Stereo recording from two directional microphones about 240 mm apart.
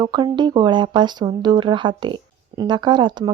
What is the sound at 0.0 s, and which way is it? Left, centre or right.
Speech, centre.